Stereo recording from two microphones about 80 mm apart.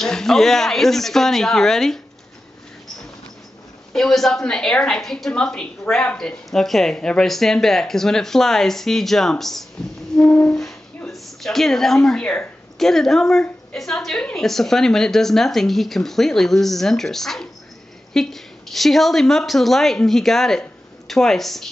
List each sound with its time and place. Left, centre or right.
0.0 s speech: centre
3.9 s speech: centre
10.2 s music: centre
11.1 s speech: centre